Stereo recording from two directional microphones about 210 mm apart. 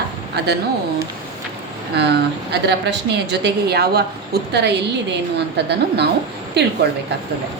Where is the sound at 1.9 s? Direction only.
55° right (ahead or behind).